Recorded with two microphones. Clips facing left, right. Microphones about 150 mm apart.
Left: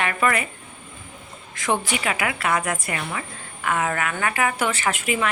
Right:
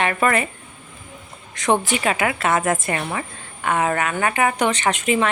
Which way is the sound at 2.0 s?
30° right (ahead or behind).